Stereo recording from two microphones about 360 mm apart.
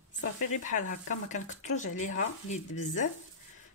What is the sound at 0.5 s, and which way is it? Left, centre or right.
Speech, left.